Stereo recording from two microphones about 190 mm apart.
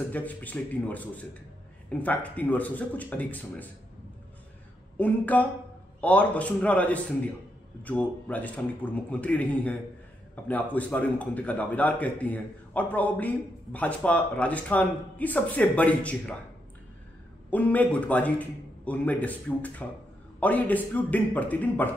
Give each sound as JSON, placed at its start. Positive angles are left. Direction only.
{"t": 0.1, "sound": "a man's voice", "side_deg": 10}
{"t": 4.9, "sound": "a man's voice", "side_deg": 10}
{"t": 17.5, "sound": "a man's voice", "side_deg": 10}